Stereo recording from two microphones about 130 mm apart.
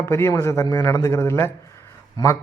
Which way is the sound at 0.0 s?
20° left (ahead or behind).